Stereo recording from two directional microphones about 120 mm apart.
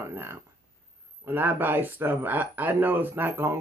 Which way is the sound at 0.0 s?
20° right (ahead or behind).